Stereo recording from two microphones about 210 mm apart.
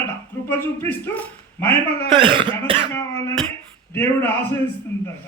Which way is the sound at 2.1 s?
25° right (ahead or behind).